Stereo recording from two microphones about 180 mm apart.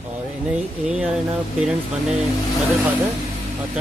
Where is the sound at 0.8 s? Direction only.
5° right (ahead or behind).